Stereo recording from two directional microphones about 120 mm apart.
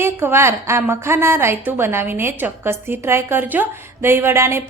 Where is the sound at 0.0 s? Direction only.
20° right (ahead or behind).